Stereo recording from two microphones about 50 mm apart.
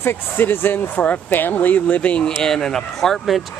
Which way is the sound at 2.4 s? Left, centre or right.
Centre.